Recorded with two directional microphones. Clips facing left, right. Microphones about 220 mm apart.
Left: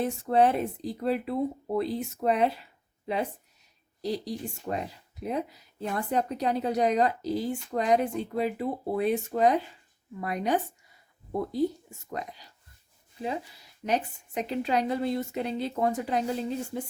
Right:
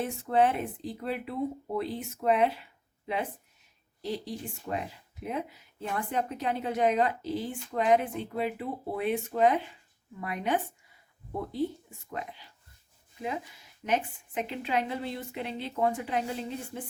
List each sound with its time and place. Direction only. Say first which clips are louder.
0.0 s speech: left 3 dB; 35° left (ahead or behind)
4.0 s speech: left 3 dB; 40° left (ahead or behind)